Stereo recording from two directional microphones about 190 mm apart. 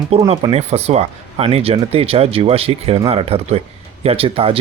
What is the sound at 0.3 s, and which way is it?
Speech, 30° right (ahead or behind).